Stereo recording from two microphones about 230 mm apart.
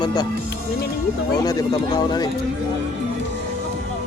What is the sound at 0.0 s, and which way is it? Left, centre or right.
Speech, centre.